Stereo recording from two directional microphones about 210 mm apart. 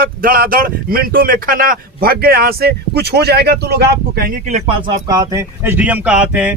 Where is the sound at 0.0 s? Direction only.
40° right (ahead or behind).